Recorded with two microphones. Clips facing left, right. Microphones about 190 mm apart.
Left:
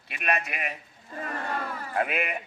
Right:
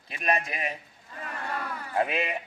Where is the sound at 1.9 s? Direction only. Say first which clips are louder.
Right 1 dB; 25° right (ahead or behind).